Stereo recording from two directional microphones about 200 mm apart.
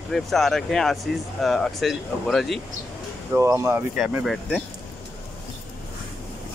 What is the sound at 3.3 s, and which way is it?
Speech, 15° right (ahead or behind).